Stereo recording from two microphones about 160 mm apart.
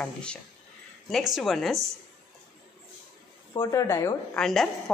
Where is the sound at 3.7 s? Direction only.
20° left (ahead or behind).